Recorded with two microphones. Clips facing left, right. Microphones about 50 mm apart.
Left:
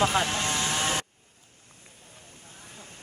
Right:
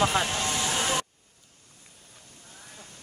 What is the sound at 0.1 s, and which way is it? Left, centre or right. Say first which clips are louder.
Speech: left 1 dB; left.